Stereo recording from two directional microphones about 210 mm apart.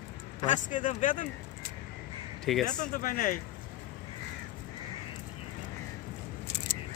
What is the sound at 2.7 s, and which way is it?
Speech, 40° left (ahead or behind).